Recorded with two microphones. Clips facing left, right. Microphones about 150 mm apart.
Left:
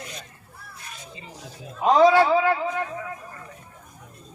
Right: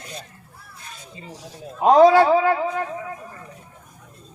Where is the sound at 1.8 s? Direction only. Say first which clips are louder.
Right 4 dB; 50° right (ahead or behind).